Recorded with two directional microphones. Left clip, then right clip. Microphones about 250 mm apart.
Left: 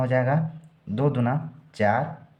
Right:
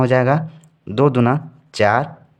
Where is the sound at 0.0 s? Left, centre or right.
Right.